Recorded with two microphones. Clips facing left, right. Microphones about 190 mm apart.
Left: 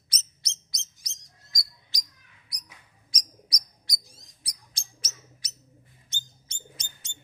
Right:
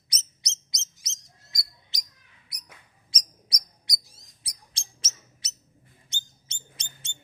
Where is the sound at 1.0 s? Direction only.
20° right (ahead or behind).